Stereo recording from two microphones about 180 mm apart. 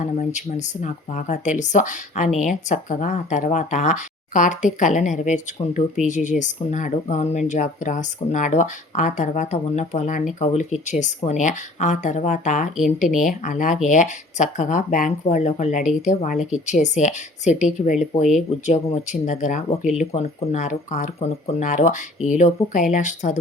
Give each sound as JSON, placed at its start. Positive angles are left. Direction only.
{"t": 0.0, "sound": "speech", "side_deg": 40}